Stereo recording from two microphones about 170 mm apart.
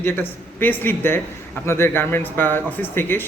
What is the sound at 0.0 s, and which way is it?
Speech, 10° left (ahead or behind).